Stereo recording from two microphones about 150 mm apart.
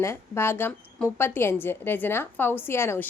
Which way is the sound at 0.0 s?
15° left (ahead or behind).